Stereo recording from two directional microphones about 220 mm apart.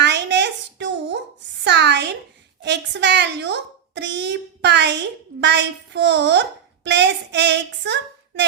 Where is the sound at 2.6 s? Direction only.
50° right (ahead or behind).